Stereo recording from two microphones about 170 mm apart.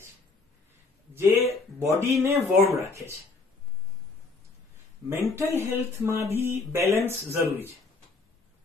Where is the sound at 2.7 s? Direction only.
15° right (ahead or behind).